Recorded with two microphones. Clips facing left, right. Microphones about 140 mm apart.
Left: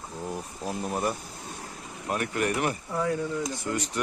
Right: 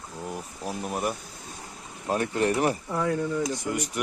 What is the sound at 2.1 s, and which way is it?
Speech, 30° right (ahead or behind).